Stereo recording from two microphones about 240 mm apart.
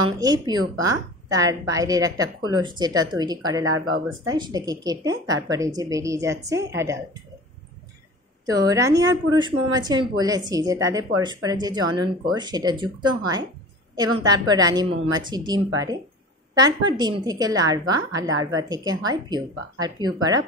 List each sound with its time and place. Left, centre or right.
0.0 s a woman's voice: centre
8.5 s a woman's voice: centre